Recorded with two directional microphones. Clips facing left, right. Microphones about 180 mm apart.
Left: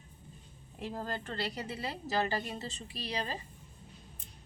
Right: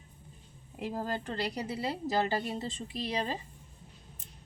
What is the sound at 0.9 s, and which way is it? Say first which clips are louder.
Speech: right 3 dB; 10° right (ahead or behind).